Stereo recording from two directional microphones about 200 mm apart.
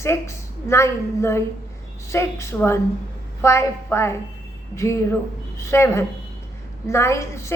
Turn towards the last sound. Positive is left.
turn(degrees=15)  # may be behind; listen again after turning